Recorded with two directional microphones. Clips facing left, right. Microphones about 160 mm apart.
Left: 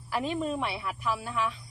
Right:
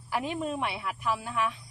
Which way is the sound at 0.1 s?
15° right (ahead or behind).